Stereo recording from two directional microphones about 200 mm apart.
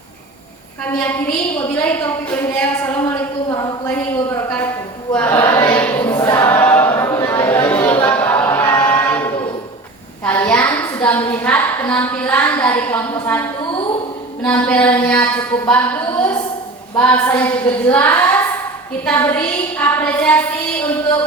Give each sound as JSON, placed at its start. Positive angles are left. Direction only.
{"t": 1.5, "sound": "a woman's voice", "side_deg": 10}
{"t": 3.5, "sound": "a sound", "side_deg": 20}
{"t": 3.8, "sound": "a woman's voice", "side_deg": 10}
{"t": 5.1, "sound": "choir", "side_deg": 10}
{"t": 8.0, "sound": "a sound", "side_deg": 10}
{"t": 10.2, "sound": "a woman's voice", "side_deg": 10}